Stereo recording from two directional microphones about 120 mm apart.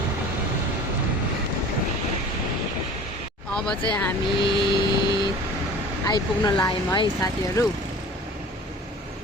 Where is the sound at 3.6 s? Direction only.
10° left (ahead or behind).